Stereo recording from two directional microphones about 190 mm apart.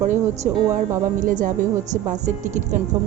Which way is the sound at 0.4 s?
40° right (ahead or behind).